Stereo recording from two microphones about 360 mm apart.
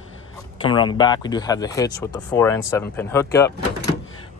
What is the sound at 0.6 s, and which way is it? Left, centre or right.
Speech, centre.